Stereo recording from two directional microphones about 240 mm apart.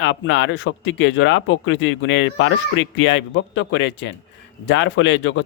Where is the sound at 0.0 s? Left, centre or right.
Left.